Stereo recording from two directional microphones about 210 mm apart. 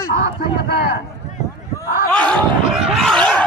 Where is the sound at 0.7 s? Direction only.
50° left (ahead or behind).